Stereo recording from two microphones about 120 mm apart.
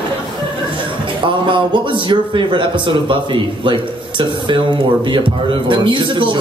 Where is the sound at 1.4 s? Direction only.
45° right (ahead or behind).